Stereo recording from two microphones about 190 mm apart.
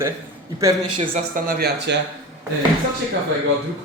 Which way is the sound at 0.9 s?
45° right (ahead or behind).